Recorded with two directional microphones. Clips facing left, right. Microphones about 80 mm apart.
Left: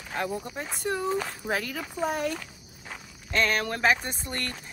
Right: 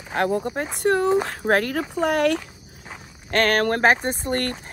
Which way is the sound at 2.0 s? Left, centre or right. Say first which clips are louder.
Right 8 dB; right.